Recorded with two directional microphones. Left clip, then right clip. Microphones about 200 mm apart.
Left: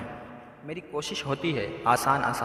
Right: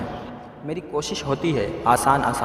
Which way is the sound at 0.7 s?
20° left (ahead or behind).